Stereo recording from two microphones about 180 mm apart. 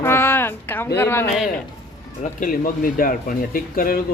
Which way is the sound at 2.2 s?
50° left (ahead or behind).